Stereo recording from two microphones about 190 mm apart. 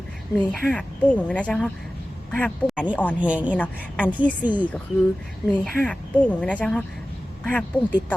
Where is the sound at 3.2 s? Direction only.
5° right (ahead or behind).